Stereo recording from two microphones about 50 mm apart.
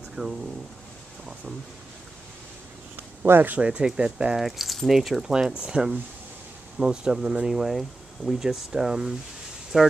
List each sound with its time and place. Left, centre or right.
0.1 s speech: centre
3.3 s speech: right
3.5 s speech: centre
4.4 s speech: centre
5.2 s speech: centre
7.5 s speech: centre